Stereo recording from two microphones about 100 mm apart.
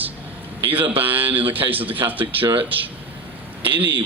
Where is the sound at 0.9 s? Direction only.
20° right (ahead or behind).